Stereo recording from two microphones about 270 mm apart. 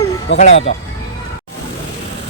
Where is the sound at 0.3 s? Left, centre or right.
Left.